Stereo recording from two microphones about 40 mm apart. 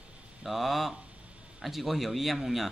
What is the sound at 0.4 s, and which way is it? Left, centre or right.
Speech, centre.